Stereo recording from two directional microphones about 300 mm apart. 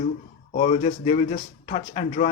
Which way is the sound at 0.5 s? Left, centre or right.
Left.